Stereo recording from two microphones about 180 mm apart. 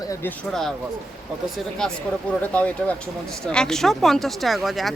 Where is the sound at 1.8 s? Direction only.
5° left (ahead or behind).